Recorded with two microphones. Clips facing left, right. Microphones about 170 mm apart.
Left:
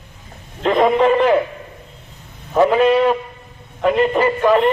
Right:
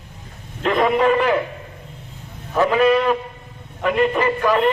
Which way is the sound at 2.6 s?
25° left (ahead or behind).